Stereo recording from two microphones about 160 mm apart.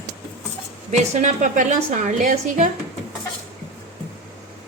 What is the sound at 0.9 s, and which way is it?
A woman's voice, 50° right (ahead or behind).